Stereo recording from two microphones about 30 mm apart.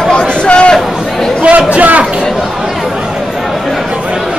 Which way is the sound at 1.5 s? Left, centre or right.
Right.